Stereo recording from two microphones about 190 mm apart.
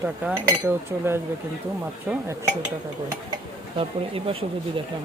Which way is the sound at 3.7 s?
30° right (ahead or behind).